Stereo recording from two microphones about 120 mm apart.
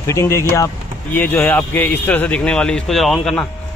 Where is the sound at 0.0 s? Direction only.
25° left (ahead or behind).